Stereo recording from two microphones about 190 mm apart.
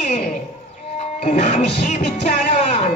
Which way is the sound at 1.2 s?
40° left (ahead or behind).